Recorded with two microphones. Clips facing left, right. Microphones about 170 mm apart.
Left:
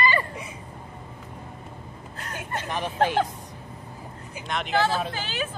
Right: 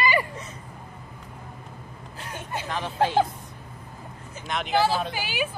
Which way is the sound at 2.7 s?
15° left (ahead or behind).